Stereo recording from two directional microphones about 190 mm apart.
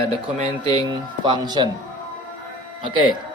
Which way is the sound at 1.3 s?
25° right (ahead or behind).